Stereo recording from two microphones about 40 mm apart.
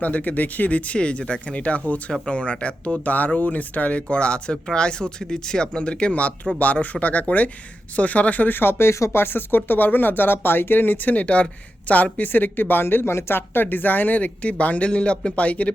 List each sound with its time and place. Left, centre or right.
0.0 s speech: left
0.9 s speech: left
8.5 s speech: left
12.8 s speech: left
14.2 s speech: left